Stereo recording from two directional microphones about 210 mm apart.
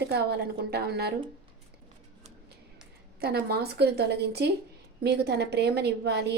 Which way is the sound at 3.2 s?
50° right (ahead or behind).